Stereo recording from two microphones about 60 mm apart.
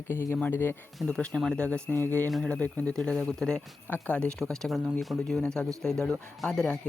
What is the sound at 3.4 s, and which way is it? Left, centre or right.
Speech, centre.